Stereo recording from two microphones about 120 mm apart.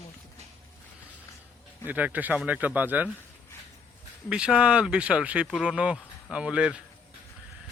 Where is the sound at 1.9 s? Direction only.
15° right (ahead or behind).